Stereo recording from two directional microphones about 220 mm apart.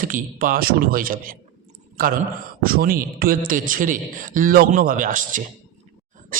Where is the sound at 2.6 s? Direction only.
40° right (ahead or behind).